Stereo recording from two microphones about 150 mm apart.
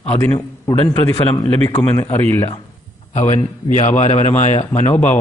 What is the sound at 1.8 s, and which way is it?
Speech, 15° left (ahead or behind).